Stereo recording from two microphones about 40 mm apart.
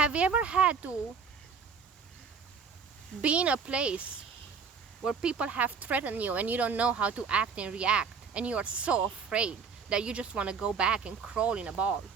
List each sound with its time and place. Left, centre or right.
0.0 s speech: right
3.2 s speech: right
5.0 s speech: right